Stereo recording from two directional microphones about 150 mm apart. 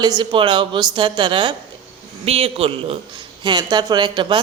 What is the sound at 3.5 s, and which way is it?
Speech, 30° right (ahead or behind).